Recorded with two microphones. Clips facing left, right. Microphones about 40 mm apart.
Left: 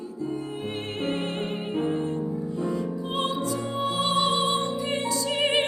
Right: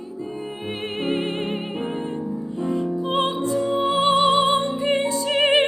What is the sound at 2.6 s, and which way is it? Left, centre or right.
Music, right.